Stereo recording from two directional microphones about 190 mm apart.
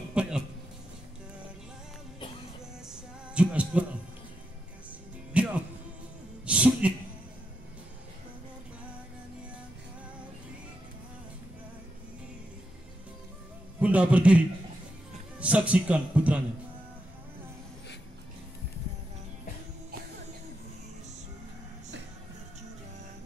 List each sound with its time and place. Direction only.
0.1 s a sound: 5° right (ahead or behind)
2.9 s music: 5° right (ahead or behind)
5.3 s music: 5° right (ahead or behind)
6.4 s a sound: 5° right (ahead or behind)
13.7 s music: 5° right (ahead or behind)
15.3 s a man's voice: 5° right (ahead or behind)